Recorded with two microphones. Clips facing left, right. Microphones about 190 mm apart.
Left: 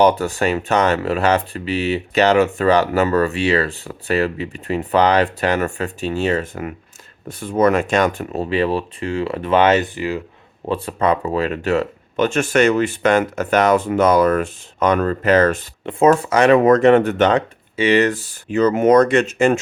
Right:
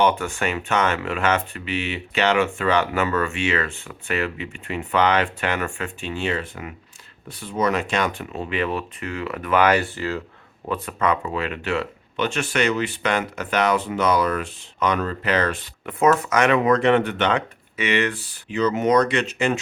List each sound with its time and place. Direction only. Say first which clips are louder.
0.0 s speech: left 6 dB; 35° left (ahead or behind); by 10.2 s 15° left (ahead or behind)
10.7 s speech: left 5 dB; 30° left (ahead or behind); by 15.6 s 45° left (ahead or behind)
15.9 s speech: left 5 dB; 30° left (ahead or behind)
16.6 s speech: left 6 dB; 45° left (ahead or behind)